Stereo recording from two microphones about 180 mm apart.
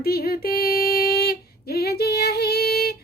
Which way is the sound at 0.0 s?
60° left (ahead or behind).